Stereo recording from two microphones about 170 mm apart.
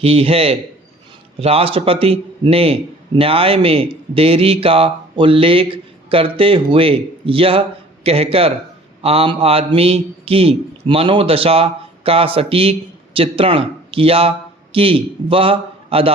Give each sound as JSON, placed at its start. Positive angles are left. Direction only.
{"t": 0.0, "sound": "a man's voice", "side_deg": -35}